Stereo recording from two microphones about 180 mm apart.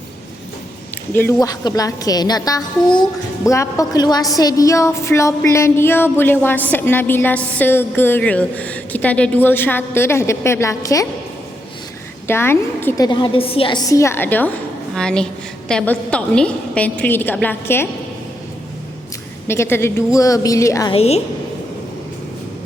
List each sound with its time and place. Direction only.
1.1 s a woman's voice: 15° left (ahead or behind)
12.3 s a woman's voice: 15° left (ahead or behind)
13.1 s a woman's voice: 25° left (ahead or behind)
19.5 s a woman's voice: 15° left (ahead or behind)
20.9 s a woman's voice: 35° left (ahead or behind)